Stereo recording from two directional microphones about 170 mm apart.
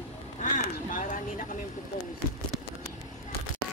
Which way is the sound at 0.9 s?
50° left (ahead or behind).